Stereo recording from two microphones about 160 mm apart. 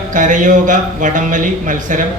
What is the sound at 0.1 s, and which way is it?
A man's voice, 55° right (ahead or behind).